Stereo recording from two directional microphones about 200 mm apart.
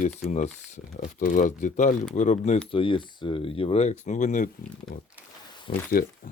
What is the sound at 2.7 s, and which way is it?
Speech, 25° left (ahead or behind).